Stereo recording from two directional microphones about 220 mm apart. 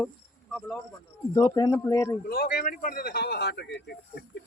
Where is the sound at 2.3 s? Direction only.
40° left (ahead or behind).